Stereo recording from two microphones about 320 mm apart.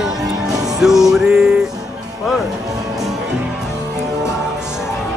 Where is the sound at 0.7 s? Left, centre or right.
Centre.